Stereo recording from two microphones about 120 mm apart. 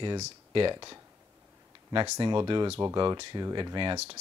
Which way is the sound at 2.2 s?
40° right (ahead or behind).